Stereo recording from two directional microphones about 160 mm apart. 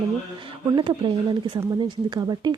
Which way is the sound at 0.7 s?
30° right (ahead or behind).